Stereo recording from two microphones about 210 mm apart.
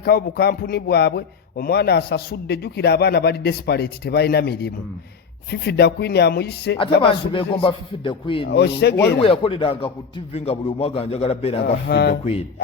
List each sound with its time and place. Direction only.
0.0 s speech: 50° left (ahead or behind)
7.0 s speech: 25° left (ahead or behind)
8.4 s speech: 55° left (ahead or behind)
9.1 s speech: 25° left (ahead or behind)
11.6 s speech: 50° left (ahead or behind)
12.2 s speech: 30° left (ahead or behind)